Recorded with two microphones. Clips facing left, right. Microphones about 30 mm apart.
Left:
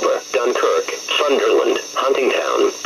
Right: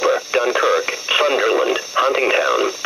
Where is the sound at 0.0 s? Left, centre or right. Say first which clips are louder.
Even; centre.